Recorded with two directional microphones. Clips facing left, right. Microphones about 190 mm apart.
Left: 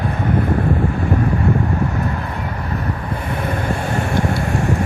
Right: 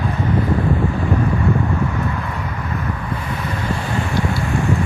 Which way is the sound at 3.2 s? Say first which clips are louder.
Left 3 dB; 55° left (ahead or behind).